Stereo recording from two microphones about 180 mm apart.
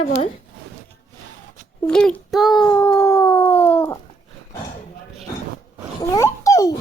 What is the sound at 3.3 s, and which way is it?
Dog, 10° left (ahead or behind).